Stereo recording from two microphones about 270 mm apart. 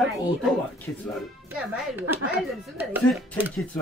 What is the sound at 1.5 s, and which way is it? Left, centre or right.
Speech, centre.